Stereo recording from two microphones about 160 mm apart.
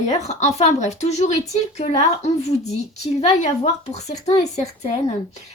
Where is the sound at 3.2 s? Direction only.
45° left (ahead or behind).